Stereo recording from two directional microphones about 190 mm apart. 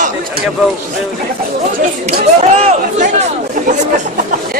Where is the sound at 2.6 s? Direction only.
35° right (ahead or behind).